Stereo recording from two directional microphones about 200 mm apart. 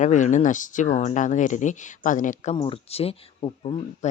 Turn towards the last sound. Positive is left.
turn(degrees=30)  # may be behind; listen again after turning